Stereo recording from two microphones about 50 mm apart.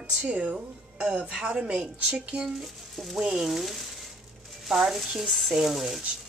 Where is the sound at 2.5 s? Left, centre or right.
Centre.